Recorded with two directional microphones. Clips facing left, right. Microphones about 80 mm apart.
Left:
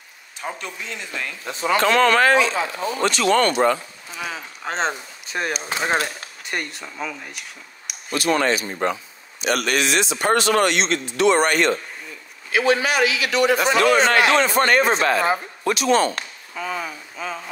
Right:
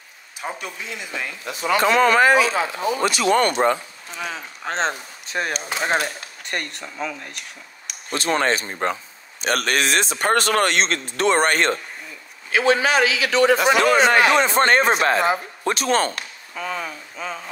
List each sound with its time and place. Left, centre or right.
0.4 s speech: centre
1.5 s speech: left
1.8 s speech: centre
4.1 s speech: centre
8.1 s a man's voice: right
13.9 s speech: centre
14.5 s a man's voice: right
16.5 s speech: centre